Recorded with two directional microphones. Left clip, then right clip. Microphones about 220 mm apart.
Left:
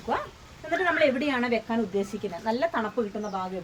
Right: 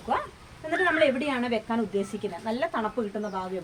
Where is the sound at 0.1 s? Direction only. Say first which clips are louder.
Right 2 dB; 10° right (ahead or behind).